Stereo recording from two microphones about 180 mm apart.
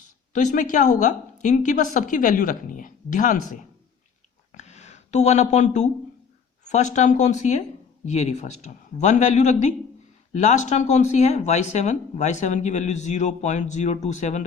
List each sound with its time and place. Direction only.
0.3 s a woman's voice: 45° left (ahead or behind)
4.5 s a sound: 40° left (ahead or behind)
6.7 s speech: 40° left (ahead or behind)